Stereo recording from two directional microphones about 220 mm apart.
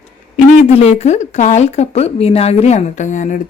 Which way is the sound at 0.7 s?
30° left (ahead or behind).